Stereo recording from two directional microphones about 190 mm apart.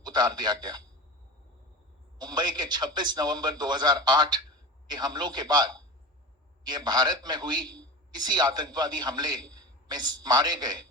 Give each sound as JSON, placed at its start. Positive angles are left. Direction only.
{"t": 0.0, "sound": "a man's voice", "side_deg": -20}
{"t": 2.1, "sound": "a man's voice", "side_deg": -25}